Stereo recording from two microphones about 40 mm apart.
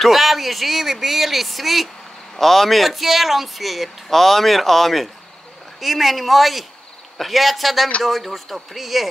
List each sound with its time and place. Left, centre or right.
0.0 s speech: centre